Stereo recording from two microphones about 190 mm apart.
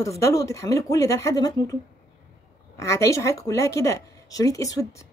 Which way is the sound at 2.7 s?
15° left (ahead or behind).